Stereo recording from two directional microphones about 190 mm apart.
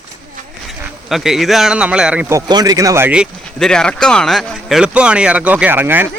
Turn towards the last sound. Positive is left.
turn(degrees=-10)  # may be behind; listen again after turning